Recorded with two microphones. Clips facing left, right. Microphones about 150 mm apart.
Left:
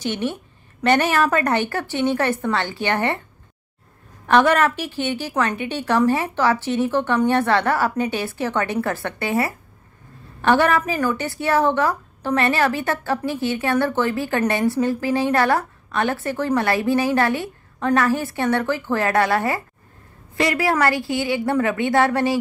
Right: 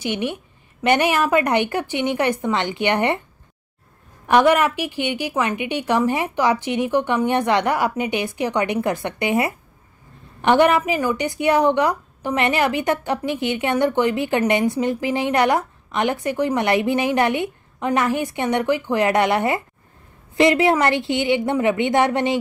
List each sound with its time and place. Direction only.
0.0 s a woman's voice: 15° right (ahead or behind)
4.3 s a woman's voice: 15° right (ahead or behind)